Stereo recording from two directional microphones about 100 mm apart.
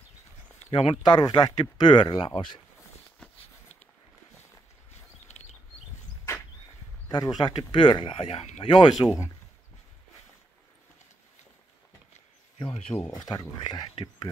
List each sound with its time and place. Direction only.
0.6 s speech: 80° left
1.0 s speech: 45° left (ahead or behind)
6.3 s a sound: 30° left (ahead or behind)
7.1 s speech: 45° left (ahead or behind); by 8.8 s 75° left (ahead or behind)
9.0 s speech: 35° left (ahead or behind)
12.5 s speech: 75° left (ahead or behind)
13.2 s speech: 40° left (ahead or behind)